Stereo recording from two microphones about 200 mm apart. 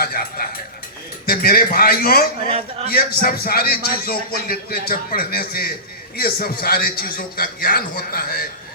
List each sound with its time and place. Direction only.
0.0 s a man's voice: 50° left (ahead or behind)